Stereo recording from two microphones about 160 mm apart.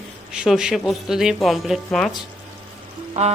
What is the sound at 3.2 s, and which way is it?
Speech, 45° right (ahead or behind).